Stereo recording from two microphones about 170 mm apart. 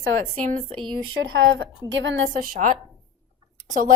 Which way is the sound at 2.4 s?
50° right (ahead or behind).